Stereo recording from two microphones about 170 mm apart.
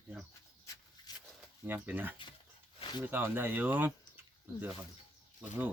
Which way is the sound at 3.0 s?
15° right (ahead or behind).